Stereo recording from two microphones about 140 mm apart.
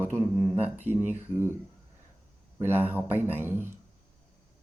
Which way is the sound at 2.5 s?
15° right (ahead or behind).